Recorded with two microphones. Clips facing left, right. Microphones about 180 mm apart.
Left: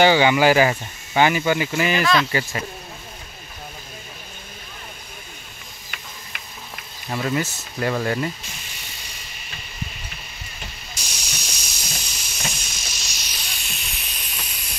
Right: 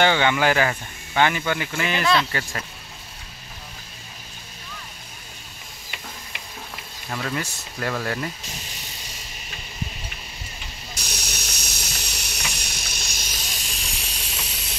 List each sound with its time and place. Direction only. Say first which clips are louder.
0.0 s speech: left 4 dB; 5° left (ahead or behind)
7.1 s speech: left 4 dB; 15° left (ahead or behind)
7.3 s speech: left 5 dB; 5° left (ahead or behind)
11.0 s a sound: right 3 dB; 65° right (ahead or behind); by 14.8 s 25° right (ahead or behind)